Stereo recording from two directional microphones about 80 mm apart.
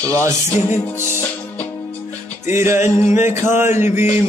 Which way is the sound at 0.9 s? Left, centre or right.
Left.